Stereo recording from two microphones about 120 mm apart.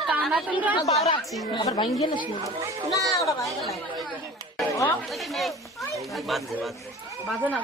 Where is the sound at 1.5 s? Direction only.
45° left (ahead or behind).